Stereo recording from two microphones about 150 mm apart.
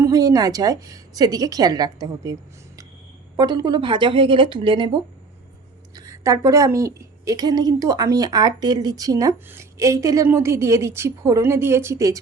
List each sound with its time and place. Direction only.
0.0 s a woman's voice: 25° right (ahead or behind)
3.3 s speech: 25° right (ahead or behind)
6.0 s a woman's voice: 20° right (ahead or behind)